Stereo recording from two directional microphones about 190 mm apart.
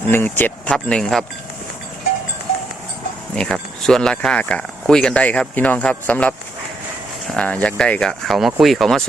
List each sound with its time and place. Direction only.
0.1 s speech: 10° left (ahead or behind)
3.3 s speech: 5° left (ahead or behind)